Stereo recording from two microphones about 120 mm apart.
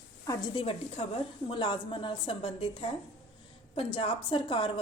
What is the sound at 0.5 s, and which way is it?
A woman's voice, 55° left (ahead or behind).